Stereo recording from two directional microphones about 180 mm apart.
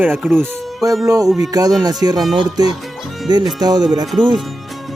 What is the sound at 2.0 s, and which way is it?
Speech, 15° right (ahead or behind).